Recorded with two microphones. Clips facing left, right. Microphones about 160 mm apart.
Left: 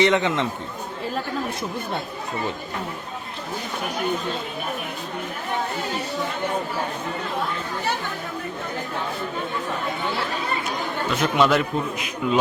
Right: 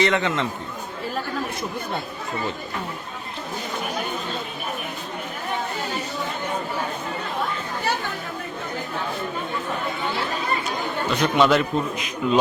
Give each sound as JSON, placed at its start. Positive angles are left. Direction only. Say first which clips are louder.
{"t": 0.0, "sound": "a man's voice", "louder": "left 2 dB", "side_deg": 20}
{"t": 11.1, "sound": "a man's voice", "louder": "right 1 dB", "side_deg": 5}